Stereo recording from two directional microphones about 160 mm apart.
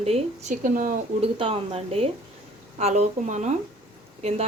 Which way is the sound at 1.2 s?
35° right (ahead or behind).